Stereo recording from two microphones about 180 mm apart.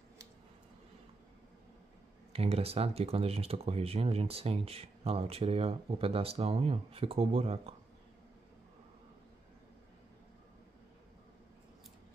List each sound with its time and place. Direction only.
2.3 s speech: 35° right (ahead or behind)